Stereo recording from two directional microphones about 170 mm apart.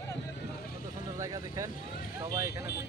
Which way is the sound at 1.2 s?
20° right (ahead or behind).